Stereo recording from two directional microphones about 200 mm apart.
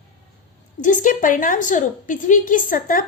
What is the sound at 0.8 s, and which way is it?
A woman's voice, 40° left (ahead or behind).